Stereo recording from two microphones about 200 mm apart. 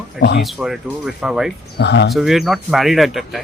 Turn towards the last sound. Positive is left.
turn(degrees=0)  # may be behind; listen again after turning